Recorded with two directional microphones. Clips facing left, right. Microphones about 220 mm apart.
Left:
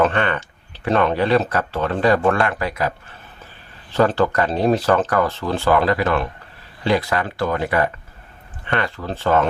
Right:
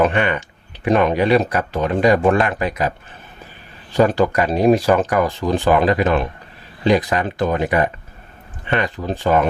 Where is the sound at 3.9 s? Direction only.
15° right (ahead or behind).